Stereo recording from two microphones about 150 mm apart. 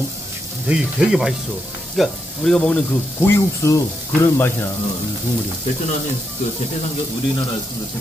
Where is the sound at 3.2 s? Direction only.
15° left (ahead or behind).